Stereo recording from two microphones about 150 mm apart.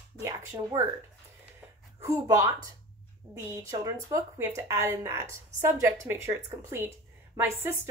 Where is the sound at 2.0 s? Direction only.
20° right (ahead or behind).